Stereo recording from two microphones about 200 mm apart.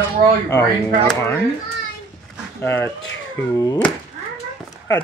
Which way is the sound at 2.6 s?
10° left (ahead or behind).